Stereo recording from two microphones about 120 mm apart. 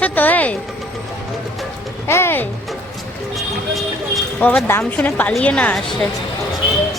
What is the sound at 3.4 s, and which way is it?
Vehicle, centre (ahead or behind).